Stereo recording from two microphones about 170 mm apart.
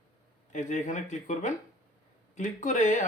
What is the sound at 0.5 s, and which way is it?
Speech, 45° left (ahead or behind).